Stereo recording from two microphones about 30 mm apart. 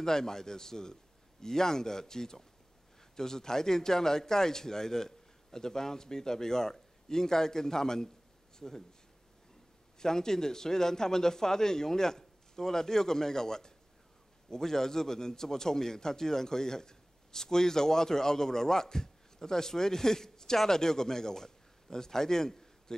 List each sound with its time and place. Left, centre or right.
0.0 s a man's voice: centre
9.9 s a man's voice: centre